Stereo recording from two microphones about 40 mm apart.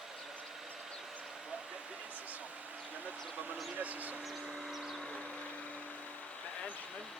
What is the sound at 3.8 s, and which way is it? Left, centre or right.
Vehicle, right.